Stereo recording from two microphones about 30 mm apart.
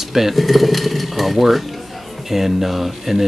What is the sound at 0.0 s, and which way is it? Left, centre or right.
Speech, centre.